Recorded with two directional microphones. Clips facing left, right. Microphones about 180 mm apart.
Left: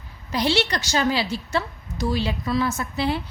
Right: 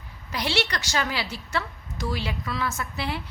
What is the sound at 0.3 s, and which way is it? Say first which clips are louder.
A woman's voice: left 5 dB; 30° left (ahead or behind).